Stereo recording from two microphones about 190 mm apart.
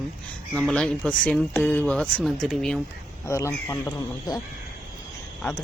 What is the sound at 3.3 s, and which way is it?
Speech, 15° left (ahead or behind).